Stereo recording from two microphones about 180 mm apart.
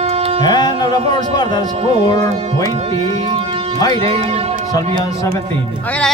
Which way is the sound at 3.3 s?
30° right (ahead or behind).